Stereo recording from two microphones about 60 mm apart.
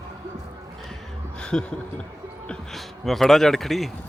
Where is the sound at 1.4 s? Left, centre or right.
Centre.